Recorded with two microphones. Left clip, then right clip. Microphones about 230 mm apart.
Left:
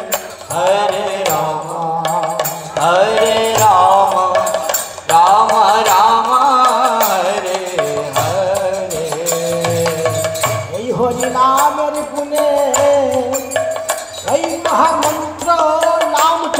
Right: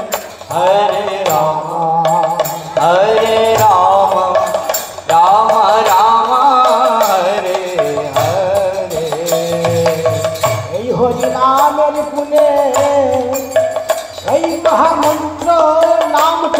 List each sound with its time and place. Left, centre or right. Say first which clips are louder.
0.6 s mantra: right 3 dB; left
2.0 s music: right 4 dB; left